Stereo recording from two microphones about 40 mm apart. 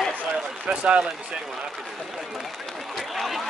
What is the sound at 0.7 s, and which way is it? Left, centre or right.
Speech, right.